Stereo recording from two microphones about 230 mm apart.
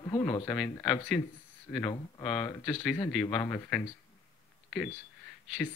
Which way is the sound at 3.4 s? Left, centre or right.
Centre.